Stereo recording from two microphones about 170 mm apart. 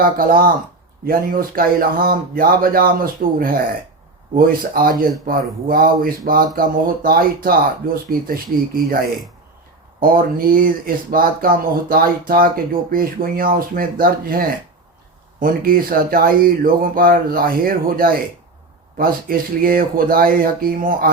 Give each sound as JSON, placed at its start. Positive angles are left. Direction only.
{"t": 0.0, "sound": "speech", "side_deg": -55}